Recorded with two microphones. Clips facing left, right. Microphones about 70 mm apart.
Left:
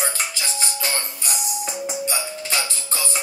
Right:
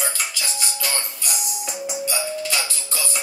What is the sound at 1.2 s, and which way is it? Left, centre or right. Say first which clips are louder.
Music: left 2 dB; left.